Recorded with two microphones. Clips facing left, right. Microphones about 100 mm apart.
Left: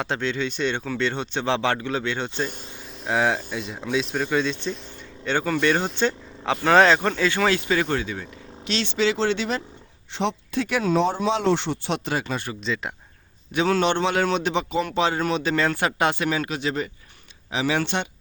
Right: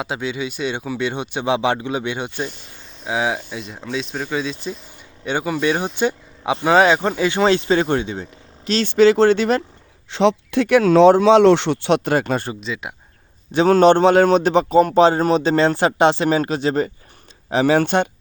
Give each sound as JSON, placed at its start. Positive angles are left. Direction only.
{"t": 0.0, "sound": "speech", "side_deg": -10}
{"t": 3.0, "sound": "speech", "side_deg": 0}
{"t": 8.6, "sound": "speech", "side_deg": -45}
{"t": 10.1, "sound": "speech", "side_deg": -90}
{"t": 12.5, "sound": "speech", "side_deg": -5}
{"t": 13.5, "sound": "a man's voice", "side_deg": -40}